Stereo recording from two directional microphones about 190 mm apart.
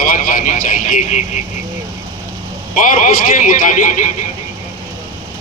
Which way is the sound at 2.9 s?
45° left (ahead or behind).